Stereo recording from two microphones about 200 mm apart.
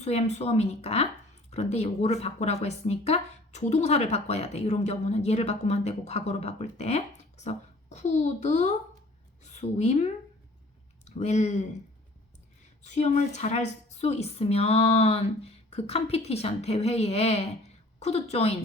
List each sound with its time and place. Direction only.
0.0 s a woman's voice: 30° left (ahead or behind)
12.8 s speech: 35° left (ahead or behind)